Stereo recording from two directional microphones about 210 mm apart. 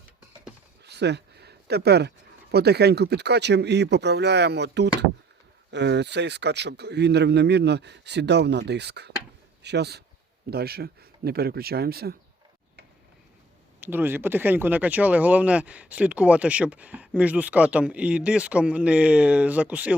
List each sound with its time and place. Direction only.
0.9 s a man's voice: 55° right (ahead or behind)
13.8 s speech: 10° right (ahead or behind)